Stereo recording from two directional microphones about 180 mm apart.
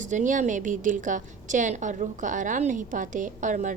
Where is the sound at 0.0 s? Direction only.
45° right (ahead or behind).